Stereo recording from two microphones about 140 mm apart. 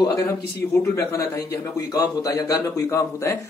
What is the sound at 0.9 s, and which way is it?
A man's voice, 20° left (ahead or behind).